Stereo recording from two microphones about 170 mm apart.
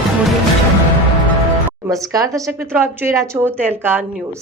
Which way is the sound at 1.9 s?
20° right (ahead or behind).